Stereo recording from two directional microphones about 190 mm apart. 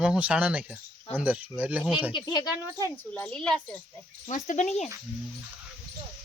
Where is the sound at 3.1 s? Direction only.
5° left (ahead or behind).